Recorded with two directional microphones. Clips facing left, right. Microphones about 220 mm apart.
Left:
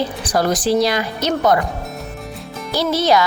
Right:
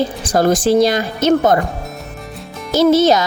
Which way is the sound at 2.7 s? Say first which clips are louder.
Right 6 dB; 45° right (ahead or behind).